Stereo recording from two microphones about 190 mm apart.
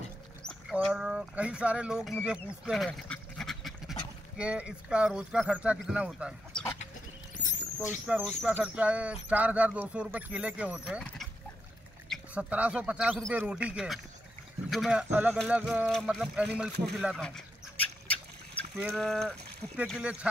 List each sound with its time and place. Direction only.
0.4 s a sound: 5° left (ahead or behind)
0.7 s speech: 5° right (ahead or behind)
2.2 s duck: 5° right (ahead or behind)
4.4 s speech: 5° right (ahead or behind)
7.3 s rodents: 40° left (ahead or behind)
8.1 s speech: centre (ahead or behind)
17.7 s a sound: 5° left (ahead or behind)
18.8 s speech: centre (ahead or behind)